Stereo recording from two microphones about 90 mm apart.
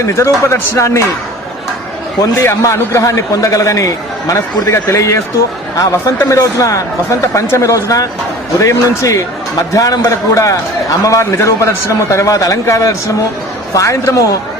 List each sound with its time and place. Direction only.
0.1 s a man's voice: 30° left (ahead or behind)
2.4 s a man's voice: 30° left (ahead or behind)